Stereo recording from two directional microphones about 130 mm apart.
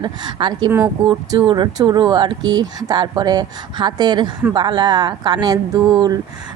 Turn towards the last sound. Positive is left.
turn(degrees=-35)  # may be behind; listen again after turning